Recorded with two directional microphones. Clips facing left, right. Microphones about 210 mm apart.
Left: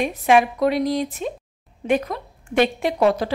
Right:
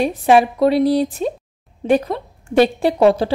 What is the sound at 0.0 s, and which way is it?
A woman's voice, 35° right (ahead or behind).